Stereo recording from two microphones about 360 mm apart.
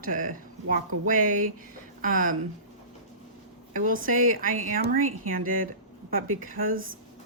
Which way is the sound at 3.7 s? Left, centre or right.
Right.